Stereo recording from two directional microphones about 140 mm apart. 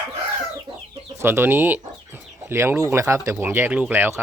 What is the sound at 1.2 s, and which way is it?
Speech, 15° right (ahead or behind).